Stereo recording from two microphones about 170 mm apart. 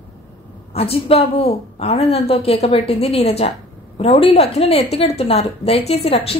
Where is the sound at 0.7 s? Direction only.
35° left (ahead or behind).